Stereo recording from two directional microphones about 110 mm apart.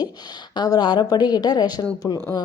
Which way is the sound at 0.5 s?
40° left (ahead or behind).